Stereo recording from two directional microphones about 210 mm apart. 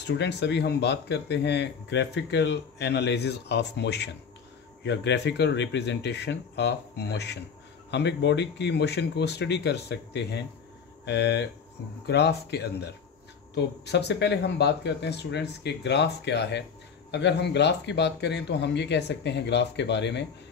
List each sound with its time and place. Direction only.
0.0 s speech: 55° left (ahead or behind)